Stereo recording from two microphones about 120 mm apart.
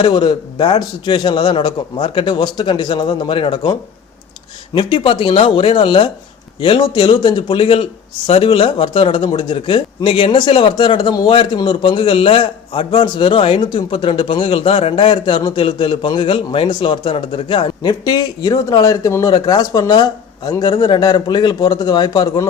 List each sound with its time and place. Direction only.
0.0 s a man's voice: 45° left (ahead or behind)
18.0 s speech: 30° left (ahead or behind)